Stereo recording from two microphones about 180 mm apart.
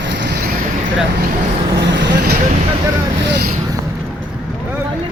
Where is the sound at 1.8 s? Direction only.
75° right (ahead or behind).